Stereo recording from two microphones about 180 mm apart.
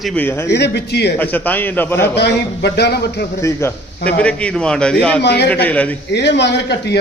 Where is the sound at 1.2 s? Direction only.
10° left (ahead or behind).